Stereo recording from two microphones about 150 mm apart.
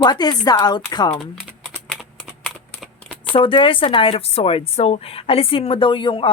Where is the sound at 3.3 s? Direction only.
35° left (ahead or behind).